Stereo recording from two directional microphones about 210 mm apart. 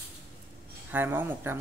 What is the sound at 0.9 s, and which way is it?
Speech, 10° right (ahead or behind).